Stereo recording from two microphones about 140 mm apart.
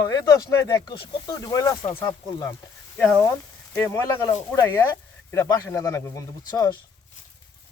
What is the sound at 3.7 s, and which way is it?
Speech, 20° left (ahead or behind).